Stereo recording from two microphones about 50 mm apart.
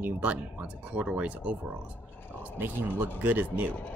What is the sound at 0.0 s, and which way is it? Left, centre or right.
Speech, right.